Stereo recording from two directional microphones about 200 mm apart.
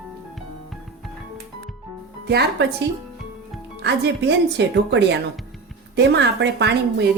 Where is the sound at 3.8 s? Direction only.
60° right (ahead or behind).